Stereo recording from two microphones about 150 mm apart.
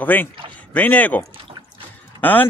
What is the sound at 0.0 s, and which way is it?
Speech, 10° left (ahead or behind).